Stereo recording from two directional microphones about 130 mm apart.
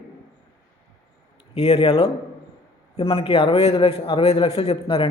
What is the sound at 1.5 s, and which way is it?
Speech, 50° left (ahead or behind).